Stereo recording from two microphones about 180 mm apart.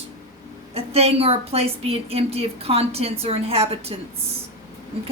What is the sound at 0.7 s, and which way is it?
A woman's voice, 35° right (ahead or behind).